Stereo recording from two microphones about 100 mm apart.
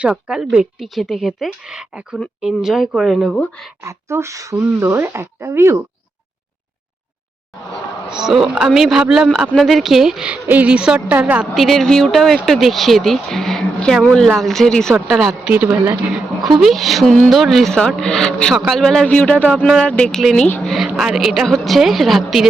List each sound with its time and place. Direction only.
0.0 s speech: 10° right (ahead or behind)
3.8 s speech: 30° right (ahead or behind)
4.5 s speech: 20° right (ahead or behind)
8.1 s a woman's voice: 5° right (ahead or behind)
11.6 s speech: 5° left (ahead or behind)
15.5 s a woman's voice: 15° right (ahead or behind)
16.1 s speech: 5° right (ahead or behind)
19.5 s a woman's voice: 5° right (ahead or behind)
19.8 s speech: 10° left (ahead or behind)